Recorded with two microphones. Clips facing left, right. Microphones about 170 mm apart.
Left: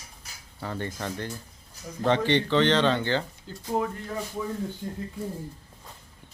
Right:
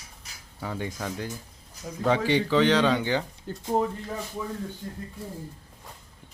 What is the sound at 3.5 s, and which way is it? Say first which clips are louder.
Speech: right 5 dB; 55° right (ahead or behind).